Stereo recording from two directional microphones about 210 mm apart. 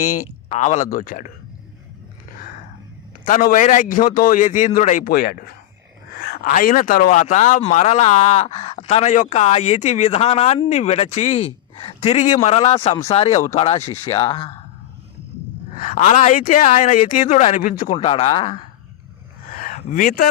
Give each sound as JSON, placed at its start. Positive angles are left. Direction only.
{"t": 0.4, "sound": "speech", "side_deg": 35}
{"t": 3.2, "sound": "speech", "side_deg": 40}
{"t": 15.8, "sound": "speech", "side_deg": 35}
{"t": 17.9, "sound": "speech", "side_deg": 25}
{"t": 19.5, "sound": "a sound", "side_deg": 40}